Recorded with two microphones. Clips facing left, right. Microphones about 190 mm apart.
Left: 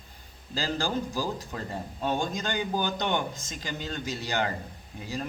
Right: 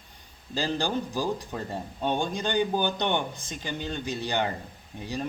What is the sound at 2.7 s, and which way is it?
A man's voice, 20° right (ahead or behind).